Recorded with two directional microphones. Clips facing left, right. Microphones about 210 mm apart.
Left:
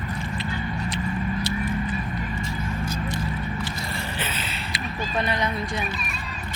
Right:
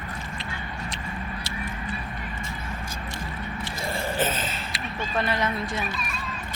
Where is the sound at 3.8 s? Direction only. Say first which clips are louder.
Right 5 dB; 50° right (ahead or behind).